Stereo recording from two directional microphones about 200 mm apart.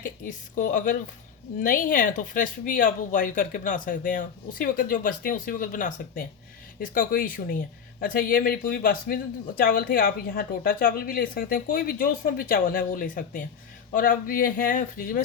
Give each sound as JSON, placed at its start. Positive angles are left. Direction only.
{"t": 0.0, "sound": "a woman's voice", "side_deg": 40}